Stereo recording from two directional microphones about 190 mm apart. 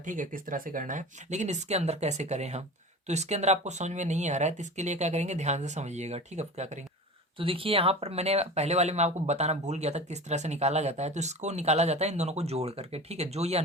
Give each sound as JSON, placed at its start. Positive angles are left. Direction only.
{"t": 0.0, "sound": "speech", "side_deg": -45}